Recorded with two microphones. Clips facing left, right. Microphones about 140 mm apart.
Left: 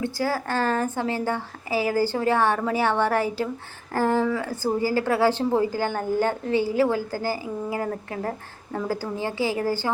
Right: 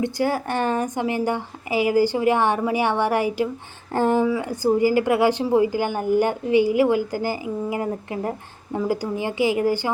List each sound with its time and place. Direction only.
0.0 s a woman's voice: 20° right (ahead or behind)